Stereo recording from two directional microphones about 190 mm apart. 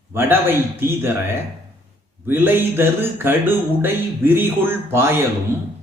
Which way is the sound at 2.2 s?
10° right (ahead or behind).